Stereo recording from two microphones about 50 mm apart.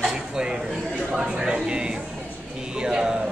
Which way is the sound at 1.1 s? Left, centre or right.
Centre.